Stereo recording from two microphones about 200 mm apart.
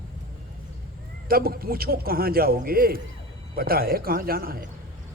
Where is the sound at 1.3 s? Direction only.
50° right (ahead or behind).